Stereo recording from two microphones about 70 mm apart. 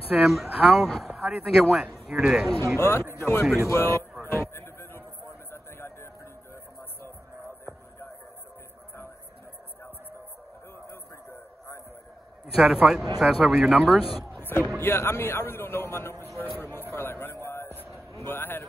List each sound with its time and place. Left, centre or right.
0.3 s speech: centre
2.8 s a man's voice: left
4.2 s a sound: left
10.9 s a sound: left
12.5 s speech: centre
14.3 s music: left
14.8 s a man's voice: left
16.3 s a sound: left
18.2 s a man's voice: left